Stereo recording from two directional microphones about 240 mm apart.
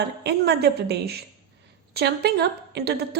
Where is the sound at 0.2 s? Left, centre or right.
Right.